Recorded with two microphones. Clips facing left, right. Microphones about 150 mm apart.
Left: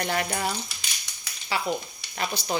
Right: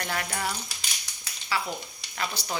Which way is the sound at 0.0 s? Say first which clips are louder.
Left 4 dB; 25° left (ahead or behind).